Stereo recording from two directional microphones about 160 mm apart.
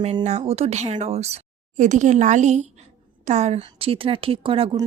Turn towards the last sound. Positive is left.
turn(degrees=-35)  # may be behind; listen again after turning